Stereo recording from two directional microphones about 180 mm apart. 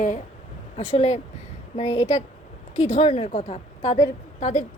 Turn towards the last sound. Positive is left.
turn(degrees=40)  # may be behind; listen again after turning